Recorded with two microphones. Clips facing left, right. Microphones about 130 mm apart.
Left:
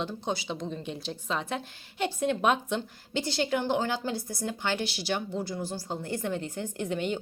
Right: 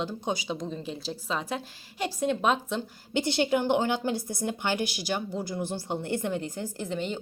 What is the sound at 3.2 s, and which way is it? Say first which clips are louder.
A woman's voice: right 3 dB; 20° right (ahead or behind).